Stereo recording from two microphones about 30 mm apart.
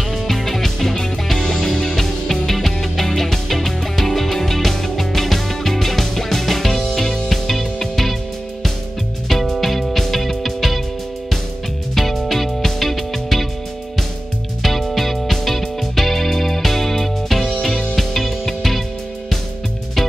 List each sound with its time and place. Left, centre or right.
0.1 s music: centre
9.3 s music: centre
11.9 s music: centre
14.6 s music: centre
17.9 s music: centre